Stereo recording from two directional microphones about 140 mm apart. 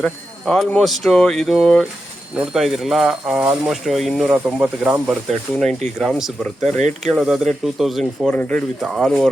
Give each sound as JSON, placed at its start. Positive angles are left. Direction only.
{"t": 0.0, "sound": "speech", "side_deg": 5}
{"t": 6.7, "sound": "speech", "side_deg": -55}
{"t": 7.1, "sound": "speech", "side_deg": -5}
{"t": 8.8, "sound": "speech", "side_deg": 0}